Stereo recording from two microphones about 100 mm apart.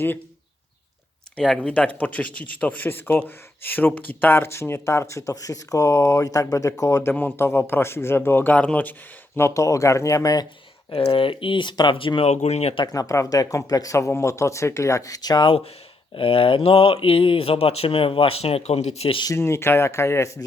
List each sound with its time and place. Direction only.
1.6 s speech: 10° left (ahead or behind)
9.6 s speech: 35° left (ahead or behind)
10.9 s speech: 60° left (ahead or behind); by 12.8 s 90° left
12.8 s speech: 35° left (ahead or behind)
16.1 s speech: 65° left (ahead or behind); by 19.2 s 80° left
19.4 s speech: 25° left (ahead or behind)